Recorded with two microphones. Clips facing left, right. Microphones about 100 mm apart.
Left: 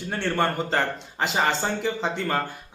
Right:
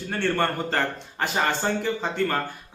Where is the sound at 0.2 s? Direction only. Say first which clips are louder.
Even; 15° left (ahead or behind).